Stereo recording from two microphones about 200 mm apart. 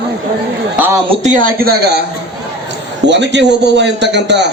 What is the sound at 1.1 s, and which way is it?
Speech, 35° right (ahead or behind).